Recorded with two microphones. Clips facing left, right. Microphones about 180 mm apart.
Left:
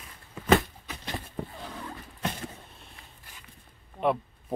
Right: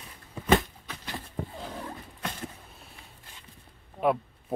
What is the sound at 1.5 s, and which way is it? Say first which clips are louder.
Roaring cats: right 2 dB; 20° right (ahead or behind).